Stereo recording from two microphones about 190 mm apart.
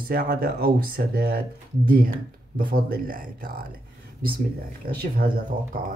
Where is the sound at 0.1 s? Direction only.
55° right (ahead or behind).